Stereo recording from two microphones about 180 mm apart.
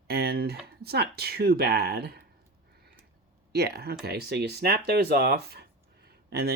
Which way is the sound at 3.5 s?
65° right (ahead or behind).